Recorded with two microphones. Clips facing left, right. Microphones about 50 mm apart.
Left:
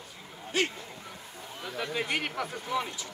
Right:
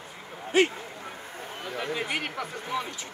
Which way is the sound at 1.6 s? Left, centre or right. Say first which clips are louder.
Right 1 dB; right.